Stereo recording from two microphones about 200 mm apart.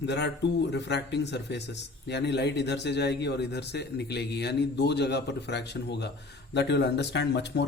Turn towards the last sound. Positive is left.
turn(degrees=60)  # may be behind; listen again after turning